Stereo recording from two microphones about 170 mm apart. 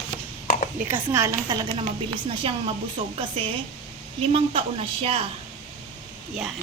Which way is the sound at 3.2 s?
35° right (ahead or behind).